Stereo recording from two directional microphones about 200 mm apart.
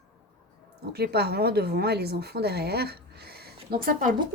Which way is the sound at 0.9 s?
55° right (ahead or behind).